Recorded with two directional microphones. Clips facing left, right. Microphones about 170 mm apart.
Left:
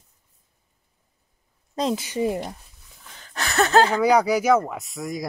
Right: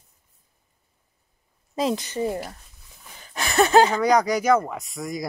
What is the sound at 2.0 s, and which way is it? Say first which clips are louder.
Speech: left 2 dB; 10° left (ahead or behind).